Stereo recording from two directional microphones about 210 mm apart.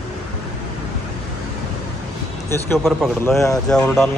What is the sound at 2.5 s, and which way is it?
A man's voice, 10° left (ahead or behind).